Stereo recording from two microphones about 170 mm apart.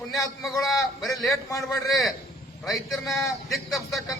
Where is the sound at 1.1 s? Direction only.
20° left (ahead or behind).